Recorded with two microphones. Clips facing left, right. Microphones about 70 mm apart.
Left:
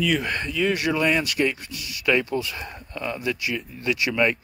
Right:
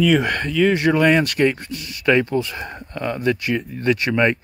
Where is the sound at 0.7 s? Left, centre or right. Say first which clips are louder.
Right 6 dB; right.